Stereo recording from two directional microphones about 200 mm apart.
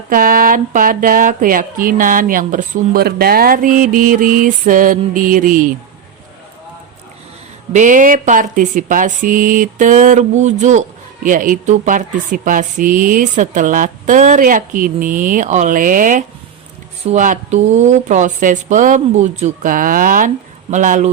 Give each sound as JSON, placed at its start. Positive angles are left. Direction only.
{"t": 0.1, "sound": "speech", "side_deg": -45}
{"t": 7.7, "sound": "speech", "side_deg": -40}